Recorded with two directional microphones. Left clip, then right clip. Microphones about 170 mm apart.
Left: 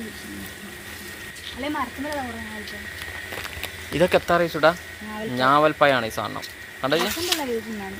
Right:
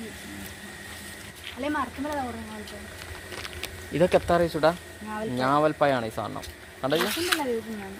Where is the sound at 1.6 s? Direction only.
20° left (ahead or behind).